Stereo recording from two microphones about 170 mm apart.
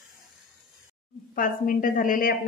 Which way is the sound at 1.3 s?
55° left (ahead or behind).